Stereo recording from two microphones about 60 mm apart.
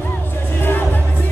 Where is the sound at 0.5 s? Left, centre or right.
Left.